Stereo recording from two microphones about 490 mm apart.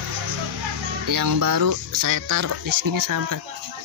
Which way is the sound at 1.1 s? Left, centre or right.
Right.